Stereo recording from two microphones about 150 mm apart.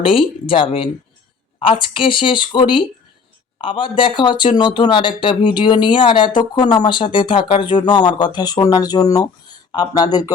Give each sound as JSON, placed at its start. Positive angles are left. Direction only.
{"t": 0.0, "sound": "speech", "side_deg": 35}